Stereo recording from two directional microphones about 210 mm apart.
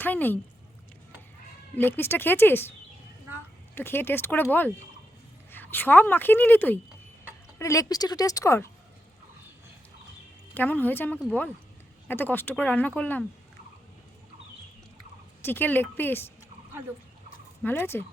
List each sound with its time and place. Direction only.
0.0 s speech: 10° left (ahead or behind)
1.7 s speech: 10° left (ahead or behind)
3.8 s speech: 10° left (ahead or behind)
10.5 s speech: 10° left (ahead or behind)
15.4 s speech: 10° left (ahead or behind)
17.6 s speech: 10° left (ahead or behind)